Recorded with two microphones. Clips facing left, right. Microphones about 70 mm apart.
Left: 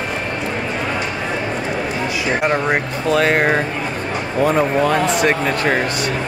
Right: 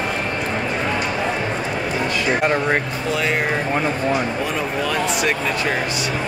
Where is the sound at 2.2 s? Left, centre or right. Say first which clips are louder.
Left 2 dB; centre.